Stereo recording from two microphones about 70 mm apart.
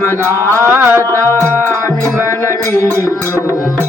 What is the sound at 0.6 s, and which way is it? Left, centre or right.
Music, right.